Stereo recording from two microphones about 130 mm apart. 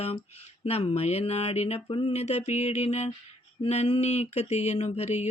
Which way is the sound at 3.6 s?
55° left (ahead or behind).